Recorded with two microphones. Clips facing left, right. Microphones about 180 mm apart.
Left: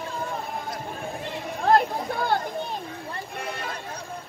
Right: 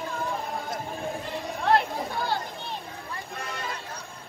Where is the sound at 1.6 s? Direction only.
50° left (ahead or behind).